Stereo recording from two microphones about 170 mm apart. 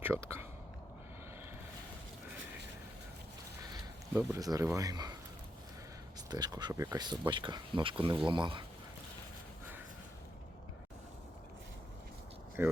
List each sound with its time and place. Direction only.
0.0 s speech: 15° right (ahead or behind)
4.1 s speech: 15° right (ahead or behind)
6.3 s speech: 25° right (ahead or behind)
12.6 s speech: 10° right (ahead or behind)